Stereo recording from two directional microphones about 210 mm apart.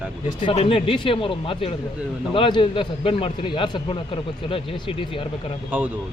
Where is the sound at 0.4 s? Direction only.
25° left (ahead or behind).